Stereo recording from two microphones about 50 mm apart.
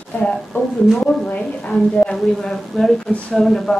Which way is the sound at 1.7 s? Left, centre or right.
Centre.